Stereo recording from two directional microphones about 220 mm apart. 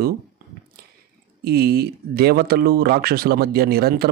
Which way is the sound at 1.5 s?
45° right (ahead or behind).